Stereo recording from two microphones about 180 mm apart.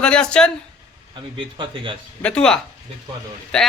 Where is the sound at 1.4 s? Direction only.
30° right (ahead or behind).